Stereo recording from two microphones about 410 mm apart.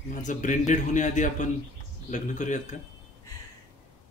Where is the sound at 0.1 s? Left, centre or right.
Centre.